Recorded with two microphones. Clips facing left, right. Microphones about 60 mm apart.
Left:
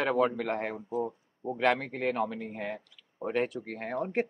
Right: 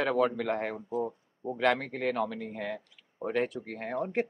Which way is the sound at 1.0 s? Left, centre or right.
Centre.